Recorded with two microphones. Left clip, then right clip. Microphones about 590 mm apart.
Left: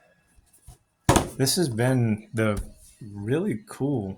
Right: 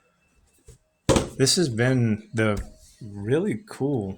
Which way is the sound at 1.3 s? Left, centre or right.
Left.